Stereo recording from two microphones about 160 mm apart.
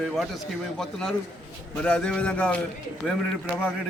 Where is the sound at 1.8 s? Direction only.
5° left (ahead or behind).